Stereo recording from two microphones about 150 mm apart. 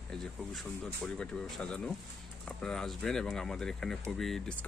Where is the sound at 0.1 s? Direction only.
Centre (ahead or behind).